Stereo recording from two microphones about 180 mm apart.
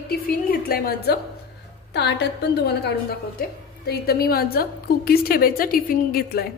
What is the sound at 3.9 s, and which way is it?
A woman's voice, 60° left (ahead or behind).